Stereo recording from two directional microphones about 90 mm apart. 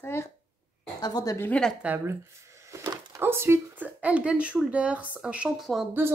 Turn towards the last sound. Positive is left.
turn(degrees=0)  # may be behind; listen again after turning